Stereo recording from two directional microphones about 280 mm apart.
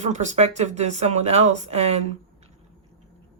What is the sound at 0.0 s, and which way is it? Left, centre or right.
Speech, right.